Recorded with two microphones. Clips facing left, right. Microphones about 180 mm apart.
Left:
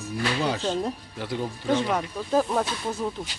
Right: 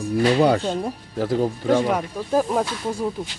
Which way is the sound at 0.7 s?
10° right (ahead or behind).